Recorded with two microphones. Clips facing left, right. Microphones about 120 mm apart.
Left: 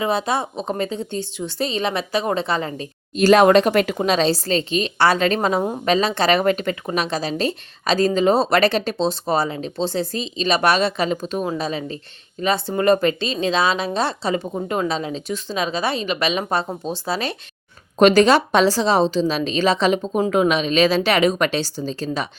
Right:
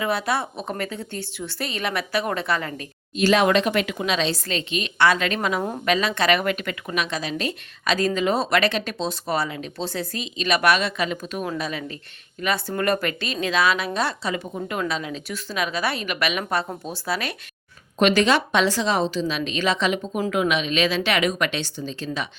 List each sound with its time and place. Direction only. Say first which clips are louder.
0.0 s speech: left 3 dB; 25° left (ahead or behind)
3.2 s speech: left 6 dB; 40° left (ahead or behind); by 17.3 s 25° left (ahead or behind)
18.0 s speech: left 5 dB; 40° left (ahead or behind)